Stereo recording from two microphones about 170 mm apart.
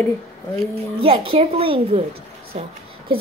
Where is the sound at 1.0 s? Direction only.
30° right (ahead or behind).